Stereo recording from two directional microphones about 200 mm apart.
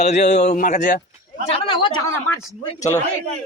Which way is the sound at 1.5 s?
25° left (ahead or behind).